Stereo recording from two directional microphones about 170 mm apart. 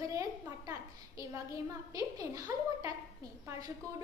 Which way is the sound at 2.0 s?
20° right (ahead or behind).